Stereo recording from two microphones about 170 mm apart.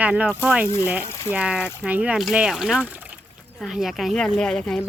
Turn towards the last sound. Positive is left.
turn(degrees=5)  # may be behind; listen again after turning